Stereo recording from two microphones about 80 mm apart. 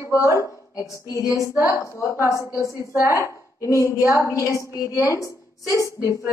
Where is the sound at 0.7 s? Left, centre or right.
Left.